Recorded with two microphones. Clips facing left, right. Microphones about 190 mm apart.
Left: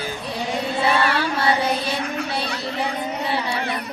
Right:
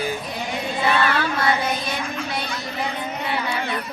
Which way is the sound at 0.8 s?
30° left (ahead or behind).